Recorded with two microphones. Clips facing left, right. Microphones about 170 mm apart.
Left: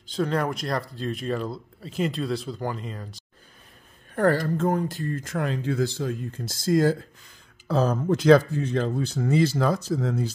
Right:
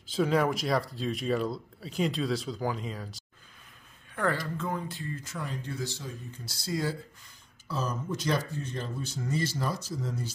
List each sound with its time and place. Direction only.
0.0 s speech: 5° right (ahead or behind)
4.1 s speech: 40° left (ahead or behind)
5.4 s speech: 90° left
5.9 s speech: 60° left (ahead or behind)
7.6 s speech: 65° left (ahead or behind)